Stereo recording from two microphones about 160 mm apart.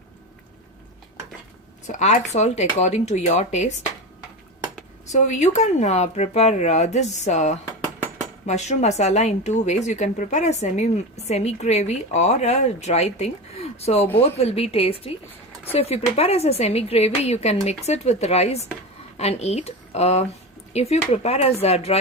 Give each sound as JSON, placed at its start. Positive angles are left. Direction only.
{"t": 1.9, "sound": "a woman's voice", "side_deg": 50}
{"t": 5.0, "sound": "a woman's voice", "side_deg": 45}